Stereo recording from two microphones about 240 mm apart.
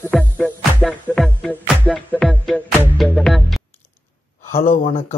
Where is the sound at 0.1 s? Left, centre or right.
Centre.